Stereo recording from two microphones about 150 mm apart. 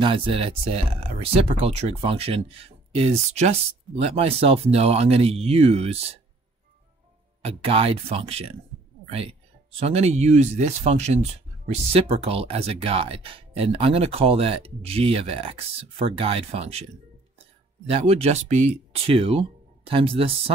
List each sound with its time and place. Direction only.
0.0 s speech: 40° right (ahead or behind)
7.4 s speech: 40° right (ahead or behind)
17.8 s speech: 40° right (ahead or behind)